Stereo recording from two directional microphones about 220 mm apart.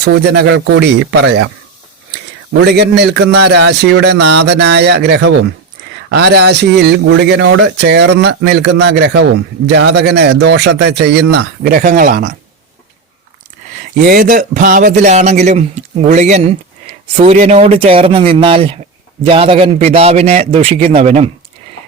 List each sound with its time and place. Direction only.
0.0 s speech: 50° right (ahead or behind)
2.5 s speech: 50° right (ahead or behind)
14.0 s a man's voice: 40° right (ahead or behind)